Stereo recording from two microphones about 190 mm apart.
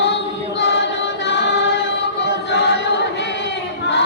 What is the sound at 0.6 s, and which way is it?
Choir, 70° left (ahead or behind).